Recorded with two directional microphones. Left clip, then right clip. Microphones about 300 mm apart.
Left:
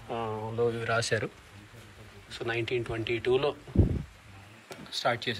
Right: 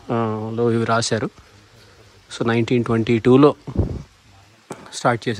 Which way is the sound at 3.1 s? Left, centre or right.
Right.